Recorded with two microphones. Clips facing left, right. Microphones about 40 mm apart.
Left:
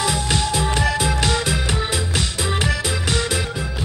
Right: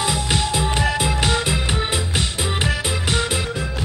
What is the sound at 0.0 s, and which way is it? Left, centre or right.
Music, right.